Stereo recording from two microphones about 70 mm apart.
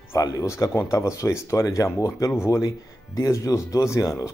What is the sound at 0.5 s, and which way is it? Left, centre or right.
Speech, left.